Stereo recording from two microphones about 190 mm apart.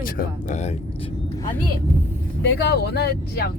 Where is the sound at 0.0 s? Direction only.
45° left (ahead or behind); by 1.1 s 30° left (ahead or behind).